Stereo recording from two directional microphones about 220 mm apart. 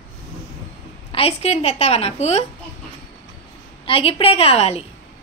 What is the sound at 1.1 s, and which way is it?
A woman's voice, 25° left (ahead or behind).